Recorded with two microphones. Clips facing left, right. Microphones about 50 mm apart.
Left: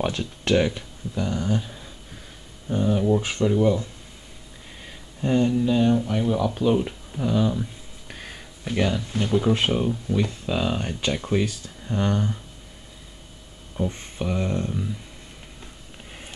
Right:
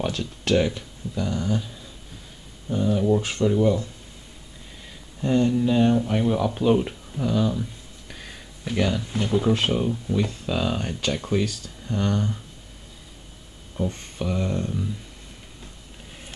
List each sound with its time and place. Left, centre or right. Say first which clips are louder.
0.5 s speech: even; centre
5.2 s speech: even; centre
5.5 s speech: even; centre
7.2 s speech: left 1 dB; centre
8.1 s a sound: left 2 dB; centre
8.6 s speech: even; centre
13.8 s speech: even; centre